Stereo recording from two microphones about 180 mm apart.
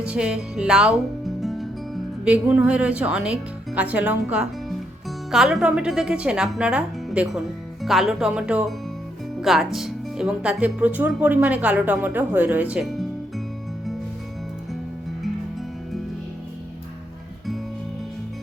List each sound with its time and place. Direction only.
0.0 s speech: 5° right (ahead or behind)
1.4 s music: centre (ahead or behind)
2.2 s speech: 5° right (ahead or behind)